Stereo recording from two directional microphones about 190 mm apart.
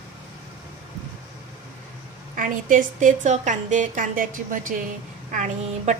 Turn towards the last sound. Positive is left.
turn(degrees=-40)  # may be behind; listen again after turning